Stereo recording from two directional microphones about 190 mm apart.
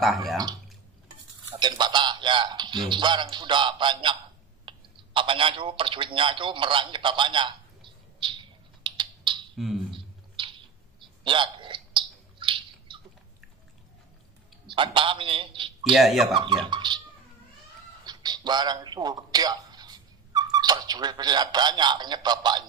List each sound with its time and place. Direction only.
0.0 s speech: centre (ahead or behind)
1.5 s a sound: 20° right (ahead or behind)
2.9 s speech: 25° right (ahead or behind)
8.8 s typing: 25° right (ahead or behind)
9.9 s a sound: 25° right (ahead or behind)
14.8 s speech: 25° right (ahead or behind)
15.8 s speech: centre (ahead or behind)
16.3 s speech: 25° right (ahead or behind)
18.0 s speech: 20° right (ahead or behind)